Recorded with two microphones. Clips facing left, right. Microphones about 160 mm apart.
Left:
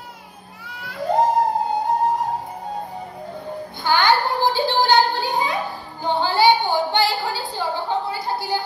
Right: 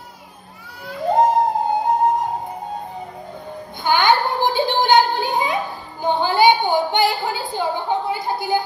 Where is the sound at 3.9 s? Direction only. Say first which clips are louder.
Right 1 dB; 20° right (ahead or behind).